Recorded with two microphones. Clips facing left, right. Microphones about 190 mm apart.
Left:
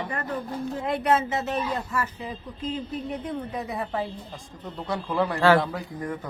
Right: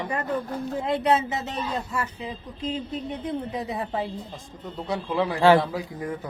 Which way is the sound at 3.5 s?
20° right (ahead or behind).